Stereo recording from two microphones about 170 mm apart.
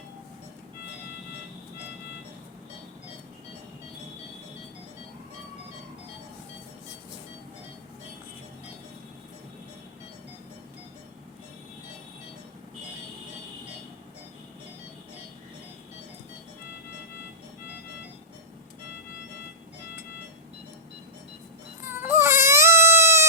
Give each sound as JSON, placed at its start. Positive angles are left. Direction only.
{"t": 21.8, "sound": "baby cry", "side_deg": -10}